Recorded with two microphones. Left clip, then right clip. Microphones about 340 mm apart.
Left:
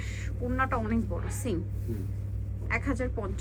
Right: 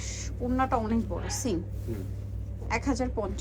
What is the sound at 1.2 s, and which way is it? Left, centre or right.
Speech, right.